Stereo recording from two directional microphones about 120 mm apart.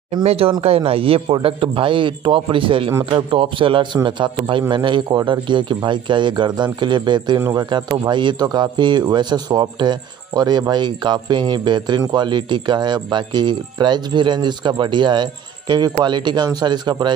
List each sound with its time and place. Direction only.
0.2 s a man's voice: 55° right (ahead or behind); by 17.1 s 35° right (ahead or behind)